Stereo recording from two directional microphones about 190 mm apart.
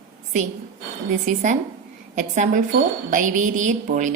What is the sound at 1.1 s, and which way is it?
A woman's voice, 40° right (ahead or behind).